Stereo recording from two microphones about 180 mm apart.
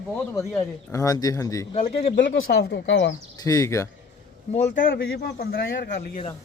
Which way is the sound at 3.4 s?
20° left (ahead or behind).